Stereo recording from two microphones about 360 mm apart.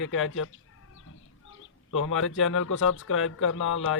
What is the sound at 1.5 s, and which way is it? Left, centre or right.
Speech, left.